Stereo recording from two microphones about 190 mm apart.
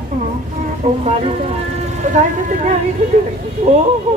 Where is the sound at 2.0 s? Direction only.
40° right (ahead or behind).